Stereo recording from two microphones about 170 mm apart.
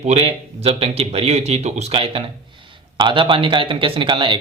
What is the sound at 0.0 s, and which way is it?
Speech, 40° right (ahead or behind).